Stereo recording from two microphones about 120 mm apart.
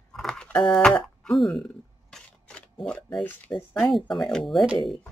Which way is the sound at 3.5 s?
25° left (ahead or behind).